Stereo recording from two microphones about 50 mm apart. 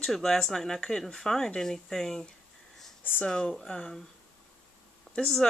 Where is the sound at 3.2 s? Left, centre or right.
Centre.